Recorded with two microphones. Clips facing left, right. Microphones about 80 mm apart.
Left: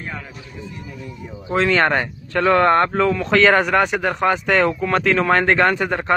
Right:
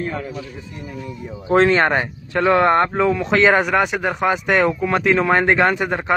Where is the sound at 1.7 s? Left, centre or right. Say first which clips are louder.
Right 1 dB; centre.